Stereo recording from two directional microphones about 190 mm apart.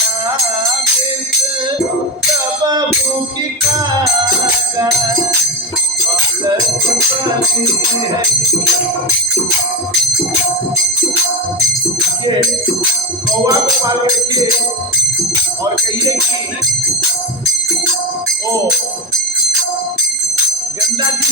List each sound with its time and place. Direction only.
13.4 s speech: 20° right (ahead or behind)